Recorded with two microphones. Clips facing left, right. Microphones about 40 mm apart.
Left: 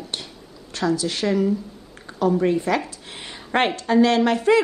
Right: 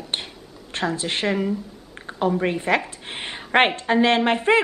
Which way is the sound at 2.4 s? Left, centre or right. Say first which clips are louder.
Left 1 dB; right.